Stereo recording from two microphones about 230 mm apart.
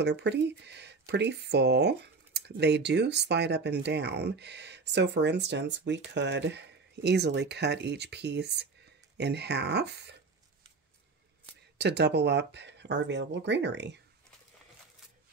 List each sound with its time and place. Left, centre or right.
0.0 s speech: right
11.8 s speech: right